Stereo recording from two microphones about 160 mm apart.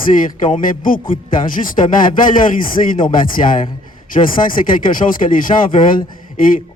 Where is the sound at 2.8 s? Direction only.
40° left (ahead or behind).